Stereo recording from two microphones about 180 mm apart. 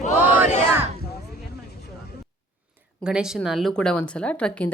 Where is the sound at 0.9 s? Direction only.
60° left (ahead or behind).